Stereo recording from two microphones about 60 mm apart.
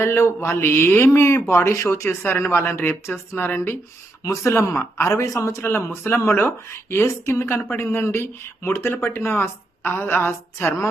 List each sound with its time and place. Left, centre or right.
0.0 s a man's voice: left
3.3 s a woman's voice: left
4.2 s a man's voice: left
5.6 s a woman's voice: left